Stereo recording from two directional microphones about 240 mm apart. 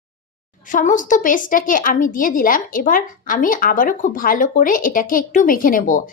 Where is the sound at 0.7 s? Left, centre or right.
Left.